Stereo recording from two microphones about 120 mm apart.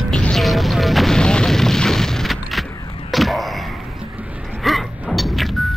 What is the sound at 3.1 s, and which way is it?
Arrow, centre (ahead or behind).